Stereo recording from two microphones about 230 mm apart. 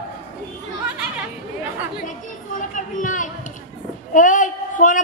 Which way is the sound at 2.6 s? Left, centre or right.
Left.